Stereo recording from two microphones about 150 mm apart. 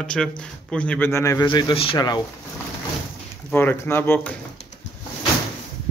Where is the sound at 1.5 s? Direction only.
35° left (ahead or behind).